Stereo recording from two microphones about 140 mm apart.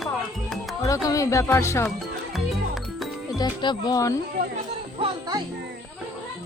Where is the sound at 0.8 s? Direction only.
25° left (ahead or behind).